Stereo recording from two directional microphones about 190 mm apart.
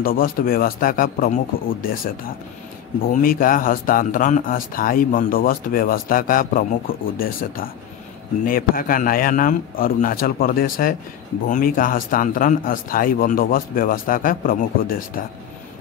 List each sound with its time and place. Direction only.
0.0 s speech: 50° left (ahead or behind)